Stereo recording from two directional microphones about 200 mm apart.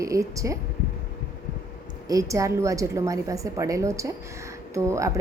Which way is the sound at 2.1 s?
15° right (ahead or behind).